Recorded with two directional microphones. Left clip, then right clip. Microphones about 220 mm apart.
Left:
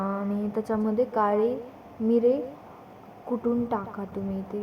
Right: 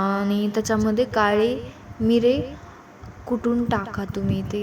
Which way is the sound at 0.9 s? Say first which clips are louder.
Right 3 dB; 30° right (ahead or behind).